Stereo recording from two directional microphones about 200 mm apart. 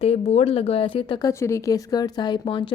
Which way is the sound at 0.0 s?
30° left (ahead or behind).